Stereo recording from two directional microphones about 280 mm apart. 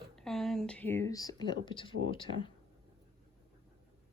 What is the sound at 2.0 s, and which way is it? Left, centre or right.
Speech, centre.